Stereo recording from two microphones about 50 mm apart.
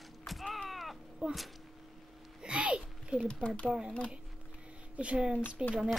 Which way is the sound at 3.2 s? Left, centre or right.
Left.